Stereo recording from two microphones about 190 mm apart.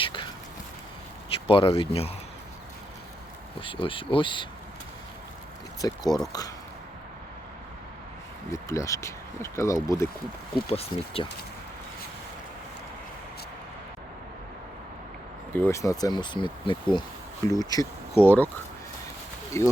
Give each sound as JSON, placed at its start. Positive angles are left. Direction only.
{"t": 0.0, "sound": "a sound", "side_deg": 25}
{"t": 1.5, "sound": "speech", "side_deg": 30}
{"t": 3.6, "sound": "speech", "side_deg": 25}
{"t": 5.8, "sound": "speech", "side_deg": 20}
{"t": 8.5, "sound": "speech", "side_deg": 15}
{"t": 10.5, "sound": "speech", "side_deg": 30}
{"t": 15.5, "sound": "speech", "side_deg": 15}
{"t": 19.6, "sound": "speech", "side_deg": 15}